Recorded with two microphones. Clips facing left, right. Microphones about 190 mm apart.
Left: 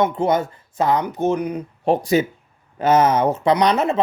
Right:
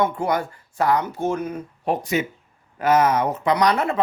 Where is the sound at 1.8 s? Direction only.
30° left (ahead or behind).